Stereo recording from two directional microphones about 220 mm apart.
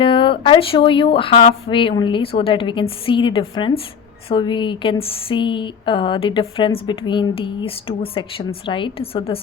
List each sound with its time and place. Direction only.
0.0 s speech: 25° left (ahead or behind)